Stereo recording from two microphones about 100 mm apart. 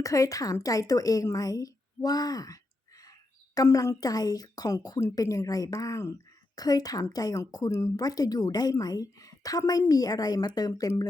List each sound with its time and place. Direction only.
0.0 s a woman's voice: 35° left (ahead or behind)